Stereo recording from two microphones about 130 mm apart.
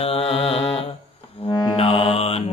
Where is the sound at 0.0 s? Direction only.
50° left (ahead or behind).